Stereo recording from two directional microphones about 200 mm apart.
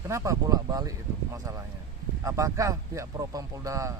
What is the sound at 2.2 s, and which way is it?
Speech, 15° right (ahead or behind).